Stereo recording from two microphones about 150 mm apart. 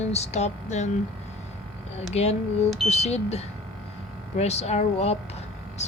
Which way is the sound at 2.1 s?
45° left (ahead or behind).